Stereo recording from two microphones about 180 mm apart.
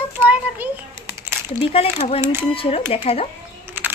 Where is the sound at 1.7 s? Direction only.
30° left (ahead or behind).